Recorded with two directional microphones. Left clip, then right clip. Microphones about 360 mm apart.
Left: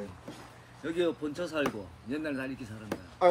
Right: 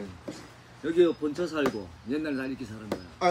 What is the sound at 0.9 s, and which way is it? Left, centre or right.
Speech, centre.